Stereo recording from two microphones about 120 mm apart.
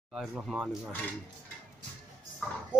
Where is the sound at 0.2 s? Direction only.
5° right (ahead or behind).